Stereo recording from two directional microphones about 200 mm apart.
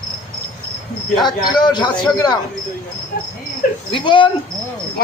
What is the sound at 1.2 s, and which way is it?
Speech, 20° left (ahead or behind).